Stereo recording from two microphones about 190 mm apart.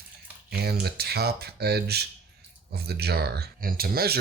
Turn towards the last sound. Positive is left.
turn(degrees=-55)  # may be behind; listen again after turning